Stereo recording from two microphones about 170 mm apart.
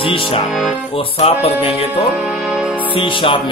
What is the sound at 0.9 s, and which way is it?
Speech, 35° left (ahead or behind).